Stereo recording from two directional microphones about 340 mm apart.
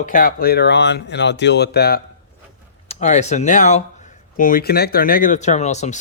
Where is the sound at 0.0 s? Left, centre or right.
Left.